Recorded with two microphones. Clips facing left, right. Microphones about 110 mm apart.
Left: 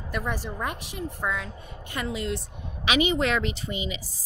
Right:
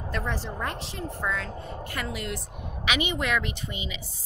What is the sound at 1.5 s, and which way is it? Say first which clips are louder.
Speech: right 6 dB; 40° right (ahead or behind).